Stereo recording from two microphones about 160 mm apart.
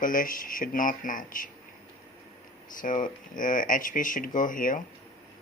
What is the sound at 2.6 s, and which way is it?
Speech, 55° left (ahead or behind).